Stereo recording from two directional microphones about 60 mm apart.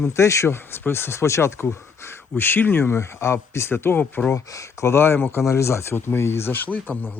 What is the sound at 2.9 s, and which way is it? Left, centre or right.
Speech, left.